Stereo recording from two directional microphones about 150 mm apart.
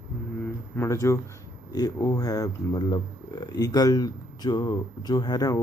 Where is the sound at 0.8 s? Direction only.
20° left (ahead or behind).